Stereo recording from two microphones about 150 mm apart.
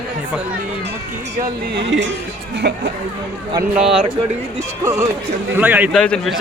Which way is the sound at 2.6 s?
90° right.